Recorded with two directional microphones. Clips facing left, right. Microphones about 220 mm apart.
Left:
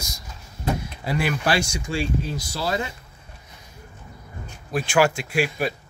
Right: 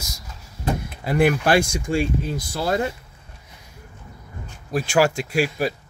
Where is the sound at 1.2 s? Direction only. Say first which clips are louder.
Right 6 dB; 55° right (ahead or behind).